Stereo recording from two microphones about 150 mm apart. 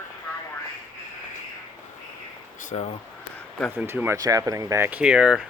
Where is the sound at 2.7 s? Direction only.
40° left (ahead or behind).